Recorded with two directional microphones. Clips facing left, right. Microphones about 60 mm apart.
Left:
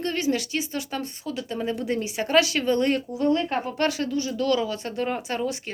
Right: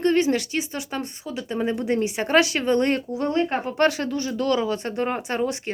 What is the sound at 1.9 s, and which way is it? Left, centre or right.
Speech, right.